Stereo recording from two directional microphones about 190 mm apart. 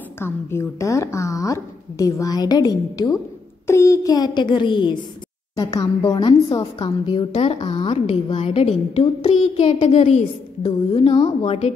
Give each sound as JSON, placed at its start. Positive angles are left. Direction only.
{"t": 0.2, "sound": "a child's voice", "side_deg": 15}
{"t": 10.6, "sound": "a child's voice", "side_deg": 25}